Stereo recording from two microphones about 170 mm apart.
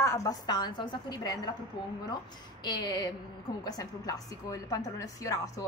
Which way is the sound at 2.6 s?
25° left (ahead or behind).